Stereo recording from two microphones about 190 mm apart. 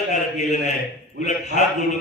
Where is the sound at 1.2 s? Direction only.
40° left (ahead or behind).